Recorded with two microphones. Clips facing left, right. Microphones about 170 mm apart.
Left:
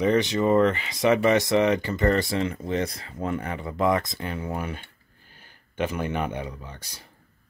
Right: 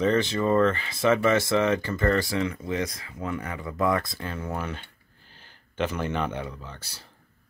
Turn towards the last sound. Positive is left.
turn(degrees=15)  # may be behind; listen again after turning